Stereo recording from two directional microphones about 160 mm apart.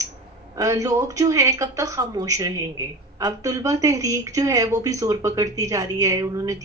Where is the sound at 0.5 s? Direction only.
20° right (ahead or behind).